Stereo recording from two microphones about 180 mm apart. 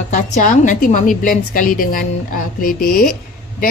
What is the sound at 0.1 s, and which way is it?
A woman's voice, 45° left (ahead or behind).